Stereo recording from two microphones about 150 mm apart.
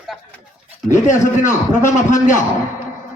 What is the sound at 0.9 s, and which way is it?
A man's voice, 60° left (ahead or behind).